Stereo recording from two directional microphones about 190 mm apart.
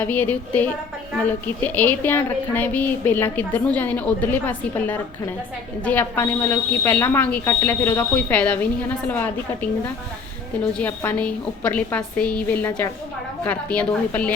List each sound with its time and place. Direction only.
0.0 s speech: 10° left (ahead or behind)